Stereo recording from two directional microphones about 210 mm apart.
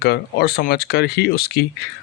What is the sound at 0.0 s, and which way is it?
Speech, 50° left (ahead or behind).